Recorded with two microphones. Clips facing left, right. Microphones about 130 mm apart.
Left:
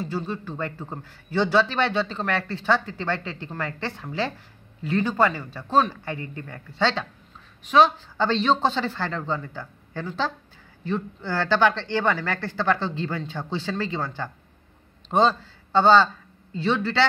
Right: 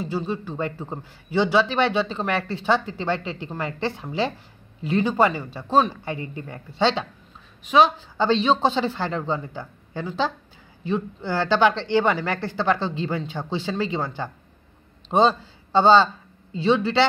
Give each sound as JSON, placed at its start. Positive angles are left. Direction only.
{"t": 0.0, "sound": "speech", "side_deg": -15}